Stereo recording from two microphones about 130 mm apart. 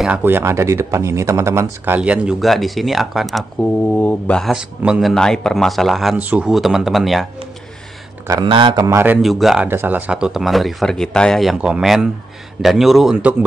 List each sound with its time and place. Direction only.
0.2 s speech: 15° right (ahead or behind)
2.0 s speech: 10° right (ahead or behind)
3.9 s speech: 10° left (ahead or behind)
4.5 s speech: 5° right (ahead or behind)
5.1 s speech: 5° left (ahead or behind)
6.1 s speech: 10° right (ahead or behind)
8.3 s a man's voice: 35° right (ahead or behind)
8.8 s speech: 15° right (ahead or behind)
9.2 s speech: centre (ahead or behind)
9.7 s speech: 15° right (ahead or behind)